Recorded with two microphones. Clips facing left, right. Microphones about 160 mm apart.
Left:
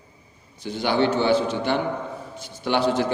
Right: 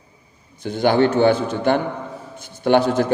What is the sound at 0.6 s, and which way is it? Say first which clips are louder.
A man's voice: right 5 dB; 50° right (ahead or behind).